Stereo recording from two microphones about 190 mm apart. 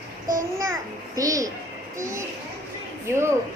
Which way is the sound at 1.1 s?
15° right (ahead or behind).